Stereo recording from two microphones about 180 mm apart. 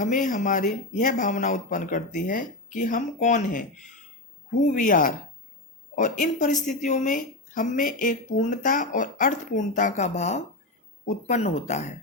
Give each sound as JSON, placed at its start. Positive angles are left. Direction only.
{"t": 0.0, "sound": "speech", "side_deg": 45}